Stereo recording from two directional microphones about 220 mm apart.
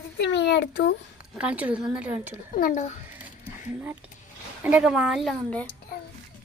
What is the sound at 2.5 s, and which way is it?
Speech, 35° left (ahead or behind).